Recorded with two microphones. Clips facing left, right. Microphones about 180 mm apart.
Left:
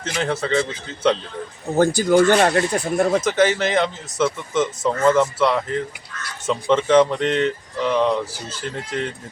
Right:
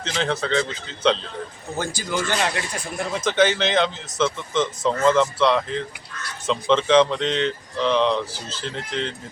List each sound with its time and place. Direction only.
0.0 s speech: 10° left (ahead or behind)
2.0 s speech: 50° left (ahead or behind)
3.2 s speech: 10° left (ahead or behind)